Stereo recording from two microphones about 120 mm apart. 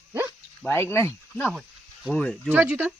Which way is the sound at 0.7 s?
20° left (ahead or behind).